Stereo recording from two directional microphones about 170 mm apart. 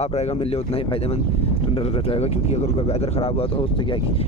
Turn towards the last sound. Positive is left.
turn(degrees=30)  # may be behind; listen again after turning